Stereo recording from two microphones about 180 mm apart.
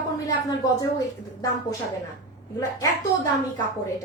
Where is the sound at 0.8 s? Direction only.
20° left (ahead or behind).